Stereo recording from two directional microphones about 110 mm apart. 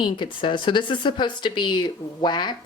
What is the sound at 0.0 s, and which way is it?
Speech, 45° left (ahead or behind).